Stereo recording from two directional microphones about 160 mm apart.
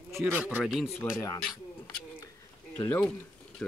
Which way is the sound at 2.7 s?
15° left (ahead or behind).